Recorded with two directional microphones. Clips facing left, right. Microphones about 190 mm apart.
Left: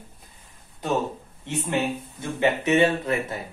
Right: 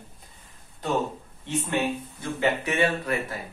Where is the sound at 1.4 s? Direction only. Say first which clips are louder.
Left 1 dB; 20° left (ahead or behind).